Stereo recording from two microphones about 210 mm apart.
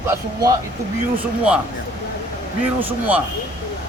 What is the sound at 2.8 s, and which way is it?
Speech, 10° right (ahead or behind).